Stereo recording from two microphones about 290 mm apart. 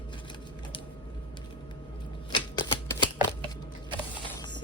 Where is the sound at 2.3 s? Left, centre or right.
Centre.